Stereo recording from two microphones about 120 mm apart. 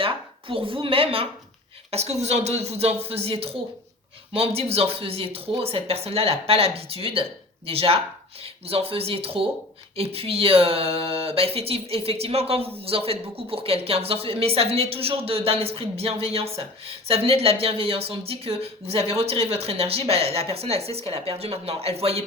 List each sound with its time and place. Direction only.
0.0 s speech: 50° right (ahead or behind)
1.9 s speech: 60° right (ahead or behind)